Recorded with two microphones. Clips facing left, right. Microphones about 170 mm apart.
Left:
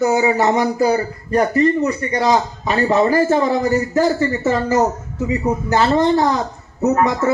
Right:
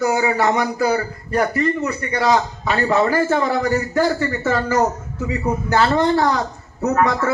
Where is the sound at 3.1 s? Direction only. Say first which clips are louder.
Left 3 dB; 30° left (ahead or behind).